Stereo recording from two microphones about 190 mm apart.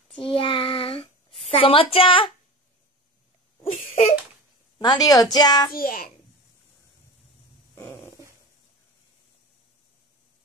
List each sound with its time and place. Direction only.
0.2 s child singing: 30° left (ahead or behind)
1.5 s a woman's voice: 30° left (ahead or behind)
3.7 s a sound: 40° left (ahead or behind)
4.7 s a woman's voice: 20° left (ahead or behind)
5.7 s a child's voice: 50° left (ahead or behind)
7.7 s a sound: 15° left (ahead or behind)